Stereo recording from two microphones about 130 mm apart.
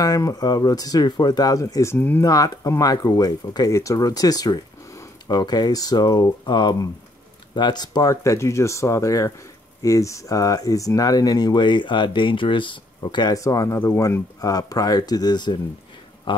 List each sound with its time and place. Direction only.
0.0 s speech: 30° left (ahead or behind)
2.2 s speech: 25° left (ahead or behind)